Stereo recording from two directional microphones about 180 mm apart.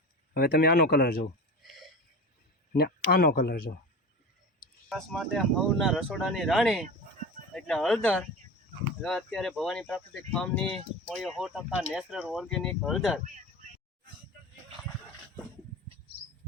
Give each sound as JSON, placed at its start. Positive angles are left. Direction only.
{"t": 0.3, "sound": "speech", "side_deg": 60}
{"t": 1.6, "sound": "a sound", "side_deg": 0}
{"t": 2.7, "sound": "speech", "side_deg": 60}
{"t": 4.9, "sound": "speech", "side_deg": 0}